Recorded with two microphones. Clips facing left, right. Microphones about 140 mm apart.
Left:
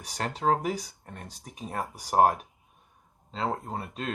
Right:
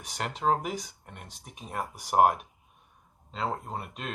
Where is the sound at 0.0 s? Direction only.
35° left (ahead or behind).